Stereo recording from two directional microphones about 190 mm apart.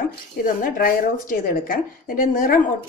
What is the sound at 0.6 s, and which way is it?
A woman's voice, 50° left (ahead or behind).